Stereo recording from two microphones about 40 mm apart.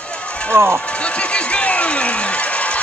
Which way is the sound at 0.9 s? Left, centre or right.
Left.